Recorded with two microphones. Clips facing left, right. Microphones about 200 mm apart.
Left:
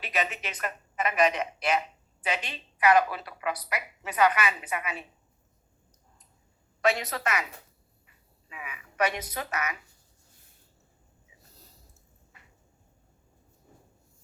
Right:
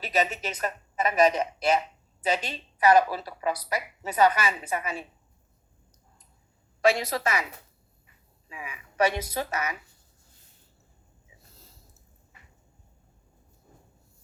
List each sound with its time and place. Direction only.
0.0 s a woman's voice: 35° right (ahead or behind)
6.8 s a woman's voice: 30° right (ahead or behind)
8.4 s a woman's voice: 30° right (ahead or behind)
11.5 s a sound: 15° left (ahead or behind)